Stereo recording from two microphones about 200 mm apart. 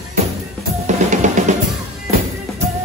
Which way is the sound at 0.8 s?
35° right (ahead or behind).